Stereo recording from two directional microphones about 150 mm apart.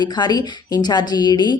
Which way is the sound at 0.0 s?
30° left (ahead or behind).